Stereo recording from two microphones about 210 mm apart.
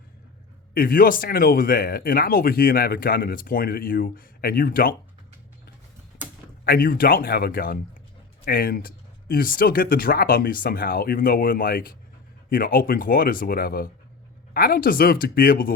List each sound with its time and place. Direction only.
0.7 s speech: 45° left (ahead or behind)
6.7 s speech: 45° left (ahead or behind)